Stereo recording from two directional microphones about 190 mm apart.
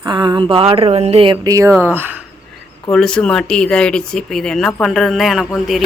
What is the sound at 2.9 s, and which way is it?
Speech, 5° left (ahead or behind).